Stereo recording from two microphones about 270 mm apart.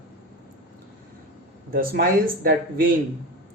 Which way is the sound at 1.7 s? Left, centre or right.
Right.